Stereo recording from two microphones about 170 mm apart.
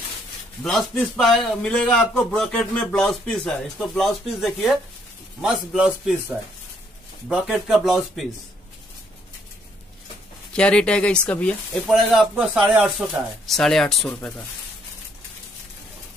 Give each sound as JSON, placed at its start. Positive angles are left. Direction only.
{"t": 0.7, "sound": "speech", "side_deg": 5}
{"t": 7.2, "sound": "speech", "side_deg": -5}
{"t": 10.5, "sound": "speech", "side_deg": 5}